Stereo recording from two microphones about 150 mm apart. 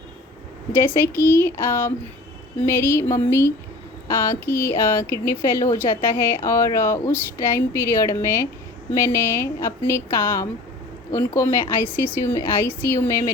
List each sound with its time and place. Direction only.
0.8 s speech: 15° left (ahead or behind)